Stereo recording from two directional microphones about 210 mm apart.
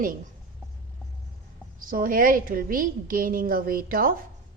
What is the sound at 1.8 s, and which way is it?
A woman's voice, 40° right (ahead or behind).